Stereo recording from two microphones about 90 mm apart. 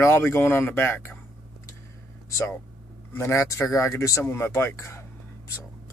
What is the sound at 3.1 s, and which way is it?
Speech, 30° left (ahead or behind).